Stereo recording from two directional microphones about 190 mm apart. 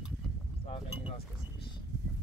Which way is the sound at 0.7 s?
30° left (ahead or behind).